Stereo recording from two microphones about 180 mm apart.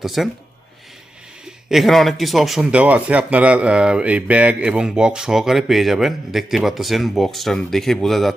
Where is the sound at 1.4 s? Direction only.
Centre (ahead or behind).